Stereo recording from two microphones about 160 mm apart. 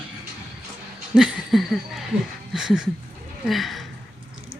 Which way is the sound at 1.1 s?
5° right (ahead or behind).